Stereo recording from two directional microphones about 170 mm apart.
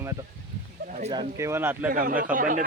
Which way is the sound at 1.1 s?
20° right (ahead or behind).